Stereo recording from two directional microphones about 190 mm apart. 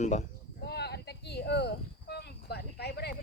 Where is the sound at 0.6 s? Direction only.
60° left (ahead or behind).